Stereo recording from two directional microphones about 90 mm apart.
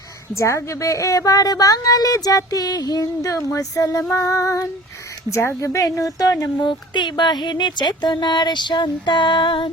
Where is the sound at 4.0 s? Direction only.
30° left (ahead or behind).